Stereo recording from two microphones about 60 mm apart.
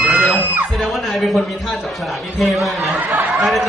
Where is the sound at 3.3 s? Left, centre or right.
Centre.